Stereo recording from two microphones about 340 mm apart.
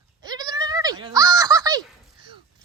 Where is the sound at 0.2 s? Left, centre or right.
Centre.